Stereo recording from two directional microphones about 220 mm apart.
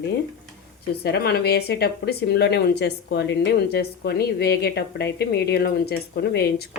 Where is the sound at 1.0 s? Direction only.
45° left (ahead or behind).